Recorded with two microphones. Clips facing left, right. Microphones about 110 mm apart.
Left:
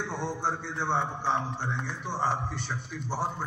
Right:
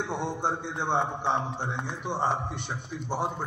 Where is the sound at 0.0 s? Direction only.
20° right (ahead or behind).